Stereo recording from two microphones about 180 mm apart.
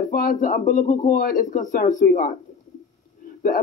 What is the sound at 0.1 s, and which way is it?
Speech, 45° left (ahead or behind).